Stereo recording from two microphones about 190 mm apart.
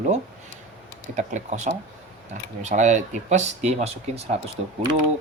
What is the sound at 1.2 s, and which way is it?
Speech, 40° right (ahead or behind).